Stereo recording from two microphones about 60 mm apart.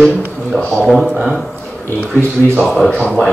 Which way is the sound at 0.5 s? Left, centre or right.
Left.